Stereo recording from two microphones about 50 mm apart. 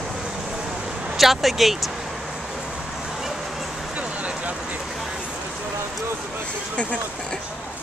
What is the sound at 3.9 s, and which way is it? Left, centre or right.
Vehicle, right.